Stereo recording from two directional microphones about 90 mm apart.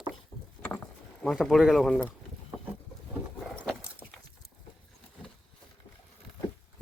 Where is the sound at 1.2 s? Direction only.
Centre (ahead or behind).